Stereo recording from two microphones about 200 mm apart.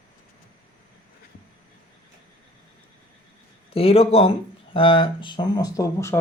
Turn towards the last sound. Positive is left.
turn(degrees=15)  # may be behind; listen again after turning